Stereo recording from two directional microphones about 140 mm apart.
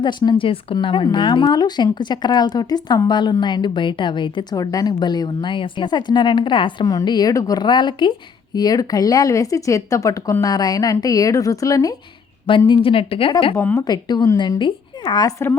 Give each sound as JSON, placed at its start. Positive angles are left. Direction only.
{"t": 0.0, "sound": "speech", "side_deg": 35}
{"t": 12.5, "sound": "speech", "side_deg": 35}
{"t": 13.6, "sound": "a woman's voice", "side_deg": 15}
{"t": 13.8, "sound": "speech", "side_deg": 30}